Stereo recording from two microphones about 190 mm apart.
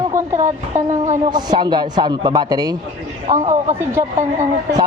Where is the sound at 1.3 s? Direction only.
20° right (ahead or behind).